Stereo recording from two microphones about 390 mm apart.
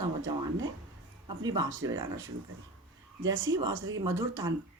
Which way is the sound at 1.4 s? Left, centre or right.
Centre.